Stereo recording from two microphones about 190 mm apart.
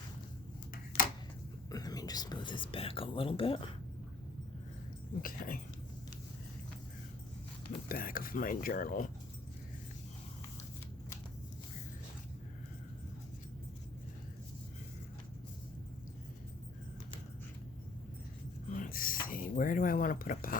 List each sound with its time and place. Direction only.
1.7 s speech: 20° left (ahead or behind)
5.2 s speech: 45° left (ahead or behind)
7.9 s speech: 50° left (ahead or behind)
18.8 s a sound: 50° left (ahead or behind)